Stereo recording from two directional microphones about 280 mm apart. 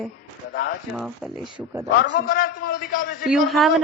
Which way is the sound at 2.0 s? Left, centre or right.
Left.